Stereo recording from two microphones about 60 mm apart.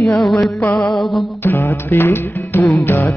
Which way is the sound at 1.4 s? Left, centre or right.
Left.